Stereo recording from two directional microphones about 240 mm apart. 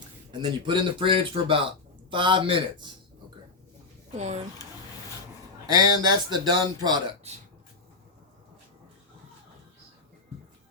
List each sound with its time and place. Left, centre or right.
0.4 s speech: centre
4.1 s speech: right
5.6 s speech: centre